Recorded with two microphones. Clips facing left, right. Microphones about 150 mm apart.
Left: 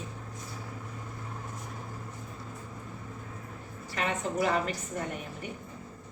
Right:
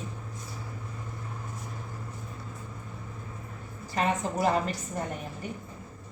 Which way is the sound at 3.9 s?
40° right (ahead or behind).